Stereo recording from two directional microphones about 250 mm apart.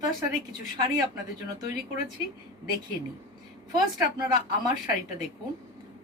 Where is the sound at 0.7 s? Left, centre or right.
Centre.